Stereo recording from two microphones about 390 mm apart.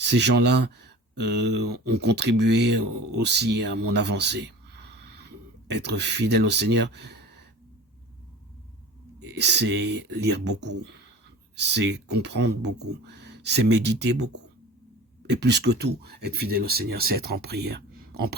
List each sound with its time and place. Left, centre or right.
0.0 s speech: right
3.9 s a sound: right
9.2 s speech: right
15.3 s speech: right